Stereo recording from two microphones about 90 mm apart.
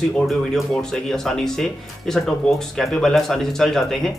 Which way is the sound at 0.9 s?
5° left (ahead or behind).